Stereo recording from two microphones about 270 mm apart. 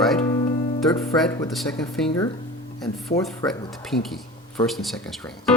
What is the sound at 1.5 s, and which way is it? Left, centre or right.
Speech, centre.